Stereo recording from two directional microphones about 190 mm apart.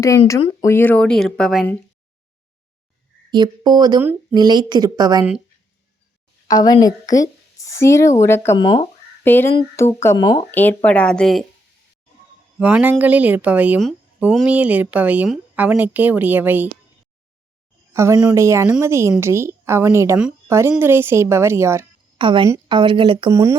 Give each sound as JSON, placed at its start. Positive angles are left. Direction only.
{"t": 0.6, "sound": "speech", "side_deg": 10}
{"t": 3.3, "sound": "speech", "side_deg": -20}
{"t": 6.5, "sound": "a woman's voice", "side_deg": 20}
{"t": 9.2, "sound": "speech", "side_deg": 10}
{"t": 10.5, "sound": "a woman's voice", "side_deg": 10}
{"t": 12.5, "sound": "speech", "side_deg": -10}
{"t": 17.9, "sound": "speech", "side_deg": -15}
{"t": 22.2, "sound": "speech", "side_deg": -25}